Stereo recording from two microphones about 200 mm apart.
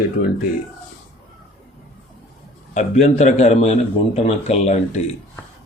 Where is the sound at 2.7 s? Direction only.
35° left (ahead or behind).